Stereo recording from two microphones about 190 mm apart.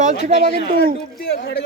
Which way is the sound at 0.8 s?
60° left (ahead or behind).